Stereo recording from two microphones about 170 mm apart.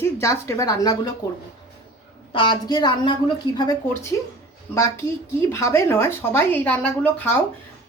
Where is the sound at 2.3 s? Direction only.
25° left (ahead or behind).